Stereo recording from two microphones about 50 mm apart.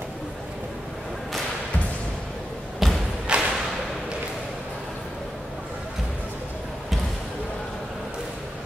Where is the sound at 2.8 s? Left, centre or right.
Centre.